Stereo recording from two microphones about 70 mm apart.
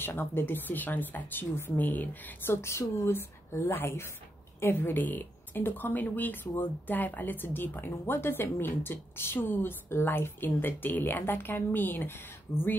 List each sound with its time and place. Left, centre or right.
0.0 s speech: left
2.5 s a woman's voice: left